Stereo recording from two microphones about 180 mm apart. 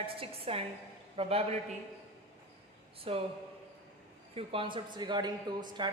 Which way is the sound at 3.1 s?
30° right (ahead or behind).